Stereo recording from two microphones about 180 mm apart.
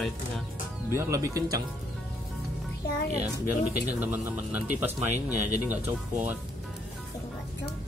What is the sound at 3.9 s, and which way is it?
A man's voice, 10° right (ahead or behind).